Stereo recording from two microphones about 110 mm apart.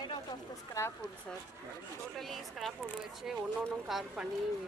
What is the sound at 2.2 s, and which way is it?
Speech, centre (ahead or behind).